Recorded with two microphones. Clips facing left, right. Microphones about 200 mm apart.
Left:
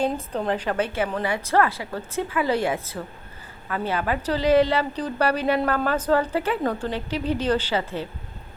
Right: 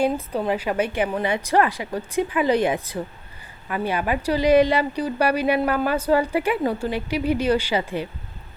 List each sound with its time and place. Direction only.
0.0 s a woman's voice: 10° right (ahead or behind)